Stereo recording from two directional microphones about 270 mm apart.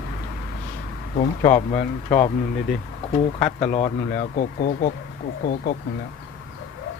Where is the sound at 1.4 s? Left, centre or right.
Left.